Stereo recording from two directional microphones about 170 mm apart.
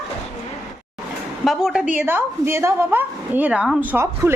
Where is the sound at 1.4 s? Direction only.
Centre (ahead or behind).